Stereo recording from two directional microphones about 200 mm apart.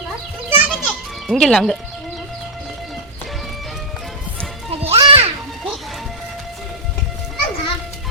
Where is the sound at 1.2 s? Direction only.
Centre (ahead or behind).